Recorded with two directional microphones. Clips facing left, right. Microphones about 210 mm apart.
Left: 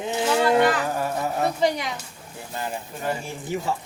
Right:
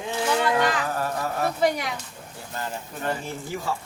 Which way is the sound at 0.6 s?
15° left (ahead or behind).